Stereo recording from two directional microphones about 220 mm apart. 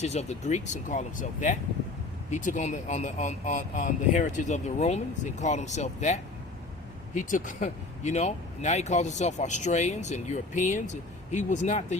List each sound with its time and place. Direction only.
0.0 s speech: 30° left (ahead or behind)